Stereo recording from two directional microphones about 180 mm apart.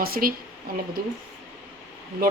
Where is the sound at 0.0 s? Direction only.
55° right (ahead or behind).